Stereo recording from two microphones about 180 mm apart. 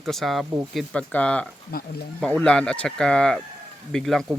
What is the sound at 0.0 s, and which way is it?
Speech, centre (ahead or behind).